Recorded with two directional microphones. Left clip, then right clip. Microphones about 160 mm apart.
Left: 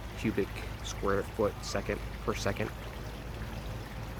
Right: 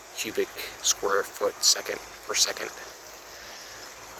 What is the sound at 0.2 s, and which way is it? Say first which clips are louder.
Speech: right 4 dB; 35° right (ahead or behind).